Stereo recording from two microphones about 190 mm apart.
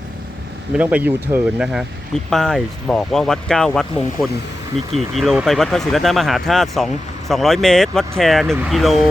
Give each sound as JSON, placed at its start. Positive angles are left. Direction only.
{"t": 0.8, "sound": "speech", "side_deg": -5}